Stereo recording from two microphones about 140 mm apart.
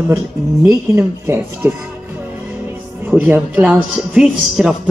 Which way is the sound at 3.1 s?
10° right (ahead or behind).